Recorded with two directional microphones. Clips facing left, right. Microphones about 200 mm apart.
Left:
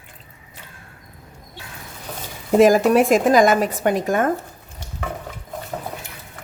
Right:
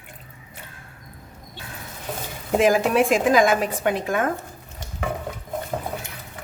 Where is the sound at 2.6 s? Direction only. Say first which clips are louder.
Left 5 dB; 40° left (ahead or behind).